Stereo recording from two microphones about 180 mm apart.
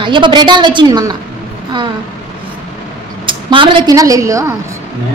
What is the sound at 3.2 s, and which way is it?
A woman's voice, 30° right (ahead or behind).